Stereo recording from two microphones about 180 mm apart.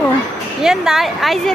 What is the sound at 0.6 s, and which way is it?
Speech, 5° right (ahead or behind).